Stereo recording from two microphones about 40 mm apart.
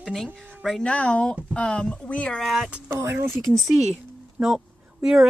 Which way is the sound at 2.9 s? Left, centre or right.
Right.